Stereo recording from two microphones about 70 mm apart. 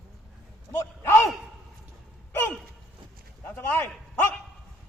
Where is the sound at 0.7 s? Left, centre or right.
Left.